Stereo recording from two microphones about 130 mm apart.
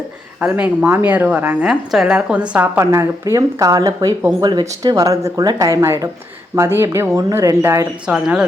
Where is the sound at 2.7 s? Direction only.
20° right (ahead or behind).